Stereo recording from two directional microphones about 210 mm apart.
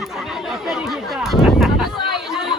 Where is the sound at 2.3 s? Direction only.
Centre (ahead or behind).